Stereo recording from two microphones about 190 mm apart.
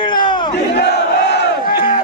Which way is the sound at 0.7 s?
60° left (ahead or behind).